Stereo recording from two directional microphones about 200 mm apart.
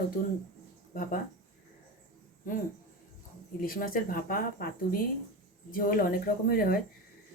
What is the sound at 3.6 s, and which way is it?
Speech, 45° left (ahead or behind).